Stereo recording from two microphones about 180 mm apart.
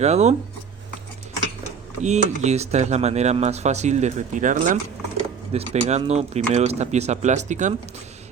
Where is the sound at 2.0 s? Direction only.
40° right (ahead or behind).